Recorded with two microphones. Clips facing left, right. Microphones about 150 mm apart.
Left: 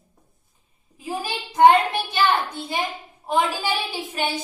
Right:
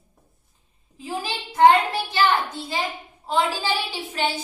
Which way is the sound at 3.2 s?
15° left (ahead or behind).